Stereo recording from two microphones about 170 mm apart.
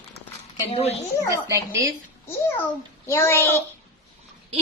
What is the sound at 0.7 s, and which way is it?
Speech, 35° left (ahead or behind).